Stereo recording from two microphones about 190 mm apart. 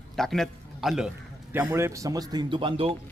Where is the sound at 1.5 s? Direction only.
15° right (ahead or behind).